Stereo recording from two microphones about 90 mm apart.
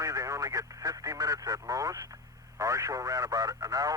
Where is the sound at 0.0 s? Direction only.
40° right (ahead or behind).